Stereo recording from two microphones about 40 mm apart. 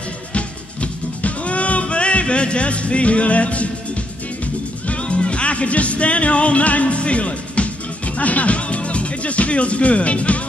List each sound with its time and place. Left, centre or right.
0.3 s music: left
8.2 s speech: left